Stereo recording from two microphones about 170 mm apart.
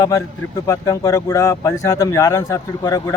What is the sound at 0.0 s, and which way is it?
A man's voice, 20° left (ahead or behind).